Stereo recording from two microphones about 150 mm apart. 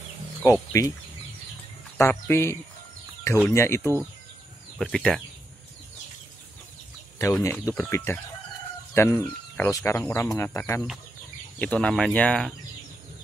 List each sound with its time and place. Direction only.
0.4 s speech: 20° left (ahead or behind)
2.0 s speech: 15° left (ahead or behind)
4.7 s speech: 5° left (ahead or behind)
7.6 s speech: 15° left (ahead or behind)
11.6 s speech: 10° left (ahead or behind)